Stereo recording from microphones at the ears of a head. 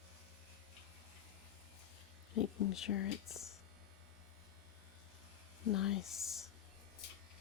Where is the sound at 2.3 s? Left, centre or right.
Left.